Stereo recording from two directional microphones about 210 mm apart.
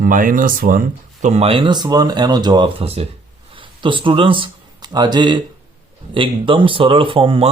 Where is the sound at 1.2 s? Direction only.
30° right (ahead or behind).